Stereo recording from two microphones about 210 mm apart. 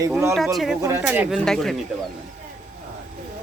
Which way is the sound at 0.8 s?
15° right (ahead or behind).